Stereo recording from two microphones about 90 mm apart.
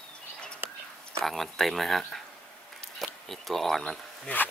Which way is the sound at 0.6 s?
25° right (ahead or behind).